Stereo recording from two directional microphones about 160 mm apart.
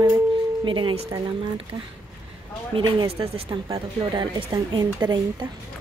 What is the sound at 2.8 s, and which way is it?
Speech, 30° right (ahead or behind).